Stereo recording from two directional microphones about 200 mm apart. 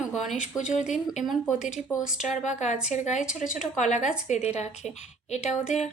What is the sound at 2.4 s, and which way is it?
A woman's voice, 35° left (ahead or behind).